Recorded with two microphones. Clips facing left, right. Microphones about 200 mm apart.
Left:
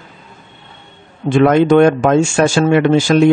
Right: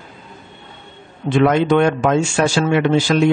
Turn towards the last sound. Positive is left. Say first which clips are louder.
# left 4 dB
turn(degrees=50)  # may be behind; listen again after turning